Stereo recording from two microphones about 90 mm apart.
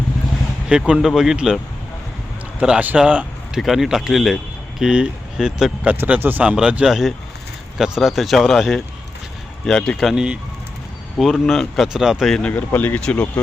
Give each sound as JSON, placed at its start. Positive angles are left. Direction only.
{"t": 0.7, "sound": "speech", "side_deg": -10}
{"t": 2.6, "sound": "speech", "side_deg": -10}
{"t": 12.3, "sound": "speech", "side_deg": 10}